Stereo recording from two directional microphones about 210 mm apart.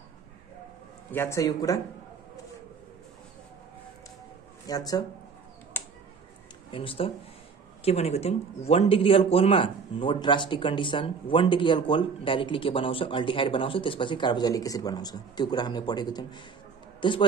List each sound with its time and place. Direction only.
1.1 s speech: 10° left (ahead or behind)
4.6 s speech: 20° left (ahead or behind)
5.7 s a sound: 10° left (ahead or behind)
6.7 s a man's voice: 25° left (ahead or behind)